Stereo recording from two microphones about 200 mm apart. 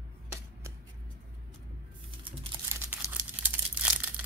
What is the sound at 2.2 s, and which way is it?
Crumpling, 20° right (ahead or behind).